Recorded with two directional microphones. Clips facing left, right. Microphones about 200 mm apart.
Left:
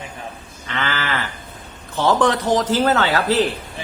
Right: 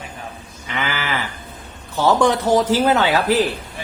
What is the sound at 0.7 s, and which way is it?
Sheep, 10° right (ahead or behind).